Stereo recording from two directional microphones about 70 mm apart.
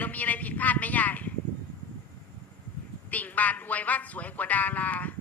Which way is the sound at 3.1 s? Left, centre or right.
Left.